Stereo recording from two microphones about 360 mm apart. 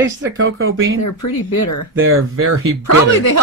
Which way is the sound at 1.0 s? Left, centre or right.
Left.